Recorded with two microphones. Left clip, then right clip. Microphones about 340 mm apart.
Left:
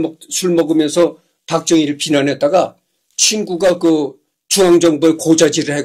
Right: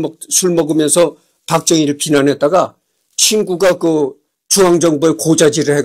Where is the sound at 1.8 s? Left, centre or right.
Centre.